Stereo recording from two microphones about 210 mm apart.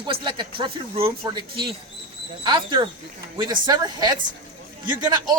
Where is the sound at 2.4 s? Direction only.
20° right (ahead or behind).